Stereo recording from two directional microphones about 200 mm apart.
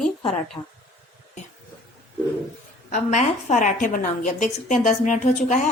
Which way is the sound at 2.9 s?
35° left (ahead or behind).